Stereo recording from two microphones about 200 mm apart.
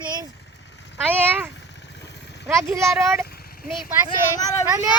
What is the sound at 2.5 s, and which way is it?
Speech, 15° right (ahead or behind).